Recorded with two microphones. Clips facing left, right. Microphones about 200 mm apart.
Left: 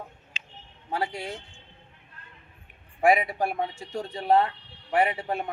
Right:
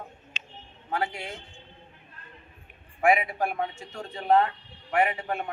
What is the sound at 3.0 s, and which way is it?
A man's voice, 35° left (ahead or behind).